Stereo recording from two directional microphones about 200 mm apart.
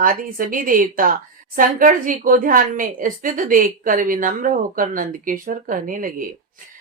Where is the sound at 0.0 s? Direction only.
45° right (ahead or behind).